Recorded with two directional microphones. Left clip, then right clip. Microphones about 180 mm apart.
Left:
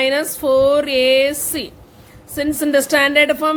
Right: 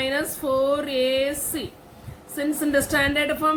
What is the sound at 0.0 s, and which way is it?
A woman's voice, 55° left (ahead or behind).